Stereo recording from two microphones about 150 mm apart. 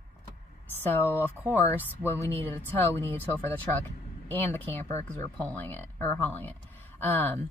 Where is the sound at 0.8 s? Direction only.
15° left (ahead or behind).